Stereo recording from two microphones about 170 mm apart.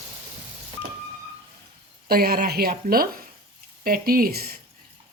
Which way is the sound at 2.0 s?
65° right (ahead or behind).